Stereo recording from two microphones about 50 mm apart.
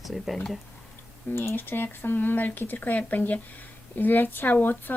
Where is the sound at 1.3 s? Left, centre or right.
Left.